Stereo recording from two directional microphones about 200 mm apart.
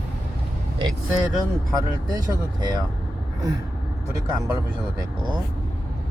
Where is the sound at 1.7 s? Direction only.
20° right (ahead or behind).